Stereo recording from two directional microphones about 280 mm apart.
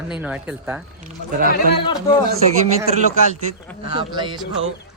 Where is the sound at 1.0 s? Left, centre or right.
Right.